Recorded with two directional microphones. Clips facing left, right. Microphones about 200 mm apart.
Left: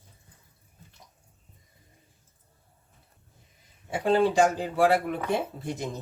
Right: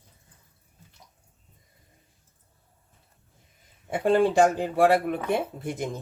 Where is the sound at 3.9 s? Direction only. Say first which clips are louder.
Right 2 dB; 55° right (ahead or behind).